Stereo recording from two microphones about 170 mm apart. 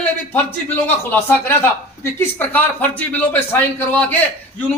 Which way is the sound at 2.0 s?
10° left (ahead or behind).